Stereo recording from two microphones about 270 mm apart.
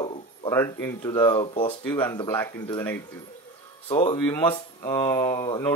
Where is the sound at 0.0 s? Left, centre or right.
Centre.